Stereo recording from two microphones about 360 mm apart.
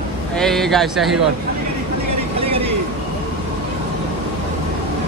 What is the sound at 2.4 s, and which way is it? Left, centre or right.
Vehicle, centre.